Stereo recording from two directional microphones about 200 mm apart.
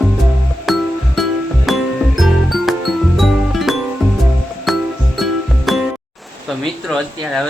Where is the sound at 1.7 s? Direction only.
Centre (ahead or behind).